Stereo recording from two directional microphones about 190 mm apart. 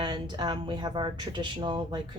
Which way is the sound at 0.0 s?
20° right (ahead or behind).